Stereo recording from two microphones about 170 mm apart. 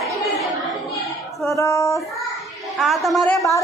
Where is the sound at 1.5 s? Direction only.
15° left (ahead or behind).